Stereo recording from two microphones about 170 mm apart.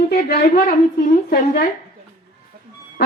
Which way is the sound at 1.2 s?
60° left (ahead or behind).